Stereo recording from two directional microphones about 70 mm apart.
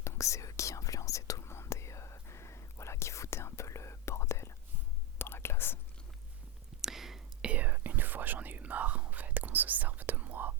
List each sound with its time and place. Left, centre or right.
0.0 s whispering: left
6.8 s whispering: centre
7.4 s whispering: right